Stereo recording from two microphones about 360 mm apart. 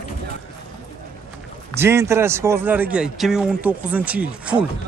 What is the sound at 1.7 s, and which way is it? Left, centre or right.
Speech, centre.